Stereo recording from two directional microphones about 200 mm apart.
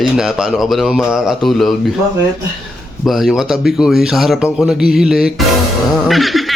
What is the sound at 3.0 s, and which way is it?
Speech, centre (ahead or behind).